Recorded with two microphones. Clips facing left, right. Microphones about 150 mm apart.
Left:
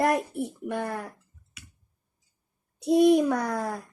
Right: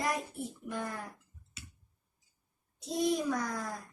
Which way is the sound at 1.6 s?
30° right (ahead or behind).